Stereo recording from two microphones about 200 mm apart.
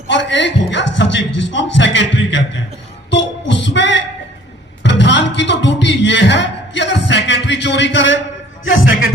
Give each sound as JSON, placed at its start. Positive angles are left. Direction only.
{"t": 0.1, "sound": "a man's voice", "side_deg": 65}
{"t": 3.1, "sound": "music", "side_deg": 65}
{"t": 8.6, "sound": "a sound", "side_deg": 70}